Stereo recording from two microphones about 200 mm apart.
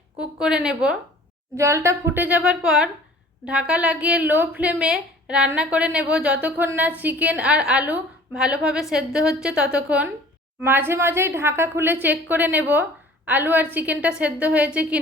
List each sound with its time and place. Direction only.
0.2 s a woman's voice: 5° right (ahead or behind)